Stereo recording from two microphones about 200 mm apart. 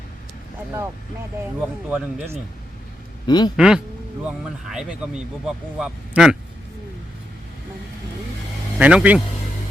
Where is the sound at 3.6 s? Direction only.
5° right (ahead or behind).